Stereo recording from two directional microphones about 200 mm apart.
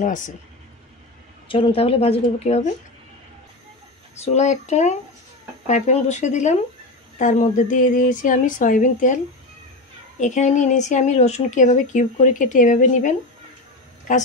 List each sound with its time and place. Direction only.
0.0 s speech: 40° left (ahead or behind)
1.5 s a woman's voice: 25° left (ahead or behind)
4.1 s speech: 35° left (ahead or behind)